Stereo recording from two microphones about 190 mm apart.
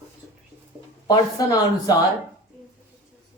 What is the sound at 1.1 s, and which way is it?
Speech, 20° left (ahead or behind).